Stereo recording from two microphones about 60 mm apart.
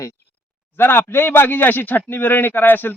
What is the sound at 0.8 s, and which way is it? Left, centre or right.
A man's voice, left.